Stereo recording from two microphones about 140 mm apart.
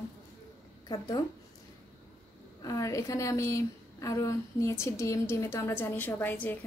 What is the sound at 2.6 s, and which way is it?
A woman's voice, 25° left (ahead or behind).